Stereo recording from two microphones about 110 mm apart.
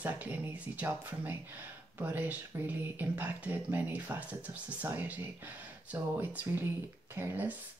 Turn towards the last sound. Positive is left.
turn(degrees=-20)  # may be behind; listen again after turning